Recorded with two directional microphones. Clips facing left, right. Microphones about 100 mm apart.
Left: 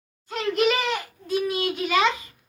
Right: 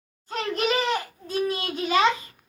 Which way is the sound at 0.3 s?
35° right (ahead or behind).